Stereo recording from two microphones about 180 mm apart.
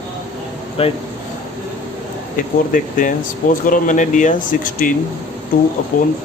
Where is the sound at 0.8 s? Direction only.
35° left (ahead or behind).